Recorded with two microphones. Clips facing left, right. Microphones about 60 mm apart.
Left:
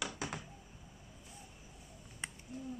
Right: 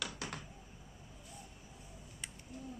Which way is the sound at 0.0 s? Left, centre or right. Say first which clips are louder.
Left 2 dB; centre.